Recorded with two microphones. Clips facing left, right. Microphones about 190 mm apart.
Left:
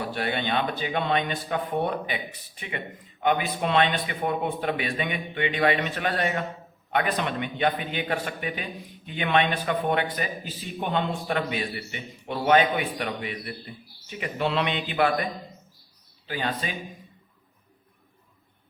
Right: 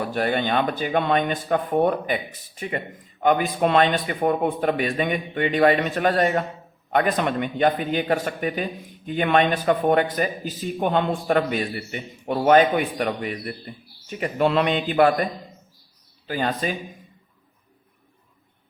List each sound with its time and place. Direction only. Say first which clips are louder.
0.0 s a man's voice: right 5 dB; 45° right (ahead or behind)